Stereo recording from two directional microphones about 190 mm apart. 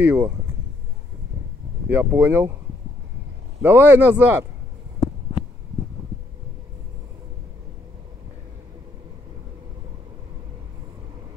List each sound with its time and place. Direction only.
0.0 s speech: 10° right (ahead or behind)
1.9 s speech: 10° right (ahead or behind)
3.6 s speech: 10° right (ahead or behind)